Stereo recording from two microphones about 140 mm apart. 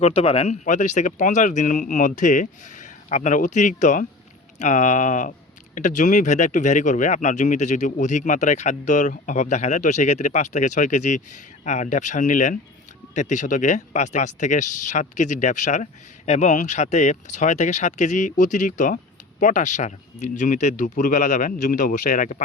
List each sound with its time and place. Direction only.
0.0 s speech: 45° left (ahead or behind); by 22.4 s 70° left (ahead or behind)